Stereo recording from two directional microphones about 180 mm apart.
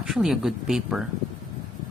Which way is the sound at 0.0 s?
Centre (ahead or behind).